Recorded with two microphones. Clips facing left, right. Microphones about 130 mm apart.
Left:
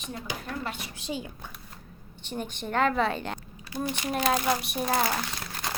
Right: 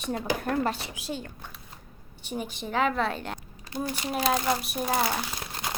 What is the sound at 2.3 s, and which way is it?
A woman's voice, 5° right (ahead or behind).